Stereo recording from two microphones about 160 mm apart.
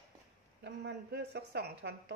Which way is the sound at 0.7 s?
90° right.